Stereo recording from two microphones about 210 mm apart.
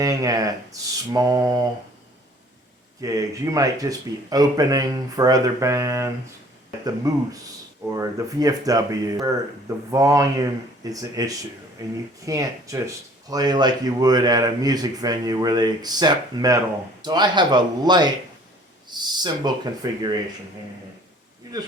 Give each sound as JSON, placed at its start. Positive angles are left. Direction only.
{"t": 0.0, "sound": "speech", "side_deg": -15}
{"t": 3.0, "sound": "speech", "side_deg": -15}
{"t": 7.1, "sound": "a man's voice", "side_deg": -15}
{"t": 21.5, "sound": "speech", "side_deg": -15}